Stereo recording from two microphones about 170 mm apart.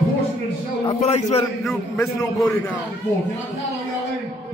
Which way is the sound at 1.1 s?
40° left (ahead or behind).